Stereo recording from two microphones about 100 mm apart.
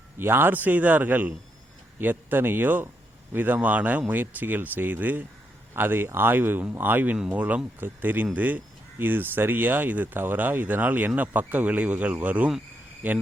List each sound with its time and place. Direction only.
0.2 s a man's voice: 20° right (ahead or behind)